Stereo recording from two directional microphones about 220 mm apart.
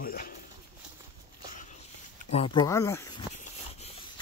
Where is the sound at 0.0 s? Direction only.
40° left (ahead or behind).